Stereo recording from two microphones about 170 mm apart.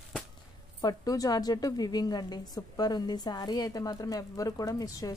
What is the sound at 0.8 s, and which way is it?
A woman's voice, 20° left (ahead or behind).